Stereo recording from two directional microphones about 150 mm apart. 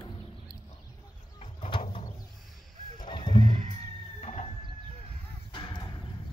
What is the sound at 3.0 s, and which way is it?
Music, 30° left (ahead or behind).